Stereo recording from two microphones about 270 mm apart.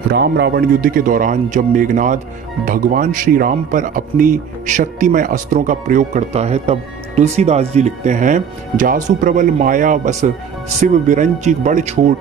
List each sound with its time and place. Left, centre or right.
0.1 s a man's voice: right